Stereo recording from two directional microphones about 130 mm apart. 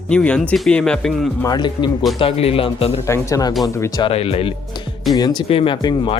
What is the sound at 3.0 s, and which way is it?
Speech, 20° left (ahead or behind).